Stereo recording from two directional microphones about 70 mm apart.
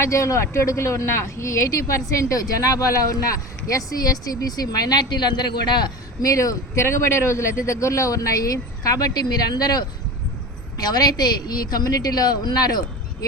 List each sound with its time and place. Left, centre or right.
0.0 s speech: left
6.2 s a woman's voice: left